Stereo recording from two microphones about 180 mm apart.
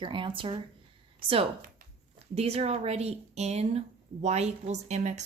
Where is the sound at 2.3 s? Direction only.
35° right (ahead or behind).